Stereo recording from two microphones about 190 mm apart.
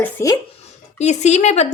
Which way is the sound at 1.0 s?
35° left (ahead or behind).